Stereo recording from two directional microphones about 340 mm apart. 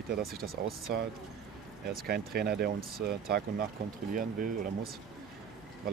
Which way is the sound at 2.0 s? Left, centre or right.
Right.